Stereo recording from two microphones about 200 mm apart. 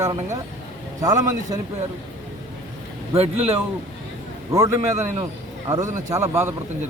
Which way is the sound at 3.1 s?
30° right (ahead or behind).